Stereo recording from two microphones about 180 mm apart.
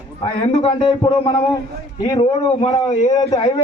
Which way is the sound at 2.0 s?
25° left (ahead or behind).